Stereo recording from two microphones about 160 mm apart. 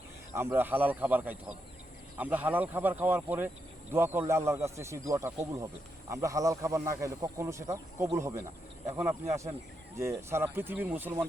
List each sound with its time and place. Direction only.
0.3 s speech: 10° right (ahead or behind)